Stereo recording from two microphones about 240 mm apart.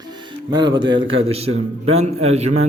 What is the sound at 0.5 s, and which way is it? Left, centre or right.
A man's voice, centre.